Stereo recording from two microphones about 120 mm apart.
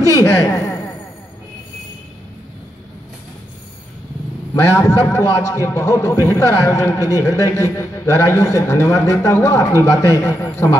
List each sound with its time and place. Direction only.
0.1 s speech: 25° left (ahead or behind)
4.7 s speech: 25° left (ahead or behind)